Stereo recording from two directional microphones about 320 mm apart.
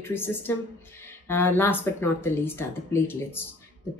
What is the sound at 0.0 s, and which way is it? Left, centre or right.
Speech, centre.